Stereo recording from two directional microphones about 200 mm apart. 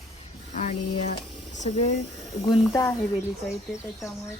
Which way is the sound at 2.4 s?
20° left (ahead or behind).